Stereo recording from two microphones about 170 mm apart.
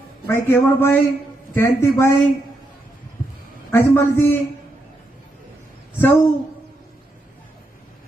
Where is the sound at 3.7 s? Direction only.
15° left (ahead or behind).